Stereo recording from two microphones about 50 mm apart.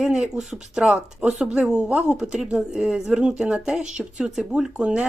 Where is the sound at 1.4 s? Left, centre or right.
Centre.